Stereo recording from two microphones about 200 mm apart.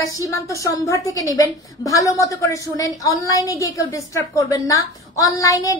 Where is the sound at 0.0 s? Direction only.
15° left (ahead or behind).